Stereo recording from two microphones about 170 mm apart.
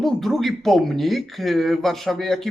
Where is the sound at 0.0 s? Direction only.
Centre (ahead or behind).